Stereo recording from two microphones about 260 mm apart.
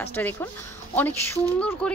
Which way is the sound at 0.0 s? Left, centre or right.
Centre.